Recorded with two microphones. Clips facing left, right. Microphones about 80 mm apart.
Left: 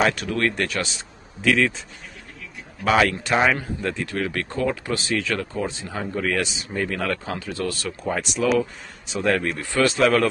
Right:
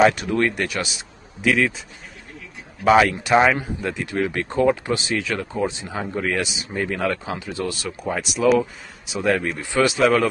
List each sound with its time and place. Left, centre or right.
0.1 s speech: centre
2.8 s speech: centre
8.1 s speech: centre
9.6 s speech: centre
9.9 s speech: centre